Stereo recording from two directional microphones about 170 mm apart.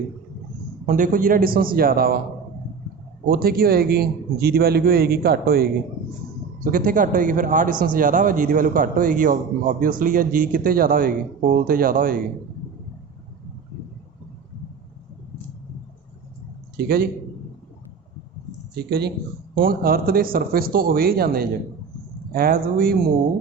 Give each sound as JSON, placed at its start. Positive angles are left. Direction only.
{"t": 0.9, "sound": "a man's voice", "side_deg": -50}
{"t": 3.2, "sound": "a man's voice", "side_deg": -60}
{"t": 6.7, "sound": "a man's voice", "side_deg": -55}
{"t": 16.7, "sound": "a man's voice", "side_deg": -65}
{"t": 18.8, "sound": "speech", "side_deg": -70}
{"t": 19.5, "sound": "a man's voice", "side_deg": -60}